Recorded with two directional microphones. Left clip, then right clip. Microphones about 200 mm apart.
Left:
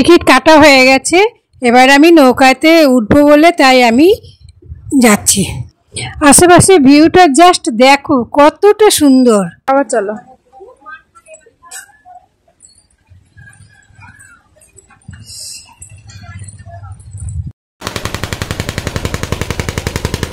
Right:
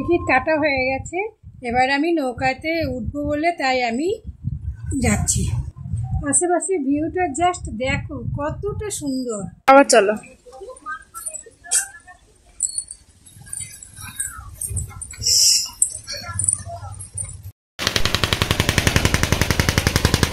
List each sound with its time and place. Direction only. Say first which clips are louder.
0.2 s a woman's voice: left 13 dB; 55° left (ahead or behind)
9.7 s speech: right 1 dB; centre (ahead or behind)
17.8 s machine gun: right 1 dB; 50° left (ahead or behind); by 19.7 s 30° left (ahead or behind)
19.8 s a sound: even; 25° left (ahead or behind)